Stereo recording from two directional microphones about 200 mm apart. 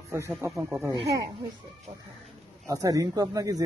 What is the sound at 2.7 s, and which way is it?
Speech, 15° right (ahead or behind).